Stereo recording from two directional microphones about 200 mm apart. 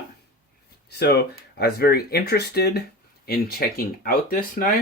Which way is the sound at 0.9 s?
55° left (ahead or behind).